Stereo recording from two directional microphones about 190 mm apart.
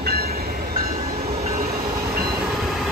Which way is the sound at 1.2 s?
35° right (ahead or behind).